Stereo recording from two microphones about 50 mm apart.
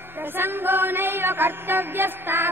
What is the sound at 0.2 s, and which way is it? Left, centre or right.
Music, right.